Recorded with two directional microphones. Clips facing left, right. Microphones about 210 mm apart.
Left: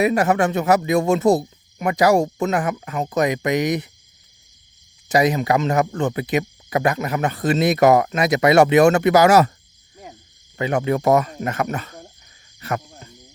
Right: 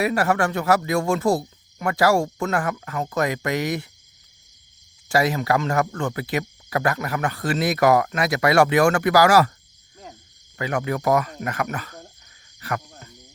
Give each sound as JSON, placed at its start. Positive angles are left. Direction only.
{"t": 0.0, "sound": "speech", "side_deg": 20}
{"t": 5.0, "sound": "speech", "side_deg": 20}
{"t": 9.9, "sound": "a sound", "side_deg": 10}
{"t": 10.6, "sound": "speech", "side_deg": 25}
{"t": 12.5, "sound": "cricket", "side_deg": 25}